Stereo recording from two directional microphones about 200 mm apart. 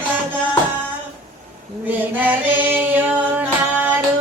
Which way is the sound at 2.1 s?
10° right (ahead or behind).